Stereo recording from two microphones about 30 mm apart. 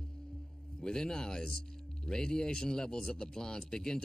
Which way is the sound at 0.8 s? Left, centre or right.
Left.